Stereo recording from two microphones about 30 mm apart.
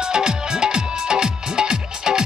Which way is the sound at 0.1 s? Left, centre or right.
Right.